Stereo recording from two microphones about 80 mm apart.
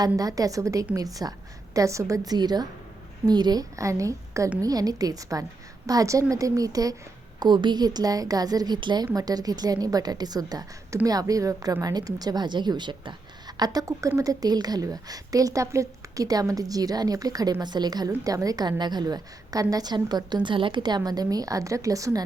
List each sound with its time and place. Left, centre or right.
0.0 s a woman's voice: right
7.3 s a woman's voice: right
9.1 s a woman's voice: right
13.6 s a woman's voice: right
17.6 s a woman's voice: right